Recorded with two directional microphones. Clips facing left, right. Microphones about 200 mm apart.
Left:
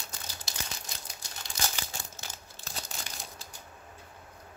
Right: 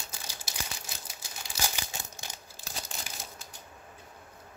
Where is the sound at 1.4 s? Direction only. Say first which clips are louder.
Right 1 dB; 10° right (ahead or behind).